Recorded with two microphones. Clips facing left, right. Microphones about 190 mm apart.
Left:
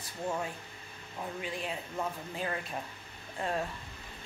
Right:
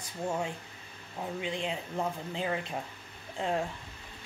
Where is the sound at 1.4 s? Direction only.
20° right (ahead or behind).